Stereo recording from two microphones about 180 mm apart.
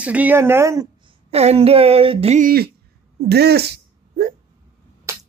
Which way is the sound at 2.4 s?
60° right (ahead or behind).